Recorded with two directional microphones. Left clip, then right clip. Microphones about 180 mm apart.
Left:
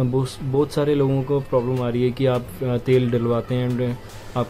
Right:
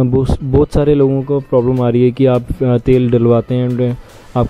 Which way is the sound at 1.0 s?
30° right (ahead or behind).